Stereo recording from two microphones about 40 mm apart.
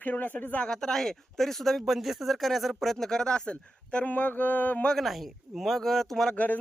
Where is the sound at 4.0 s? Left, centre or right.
Left.